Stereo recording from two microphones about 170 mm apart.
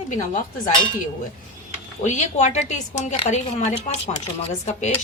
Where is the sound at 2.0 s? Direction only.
45° left (ahead or behind).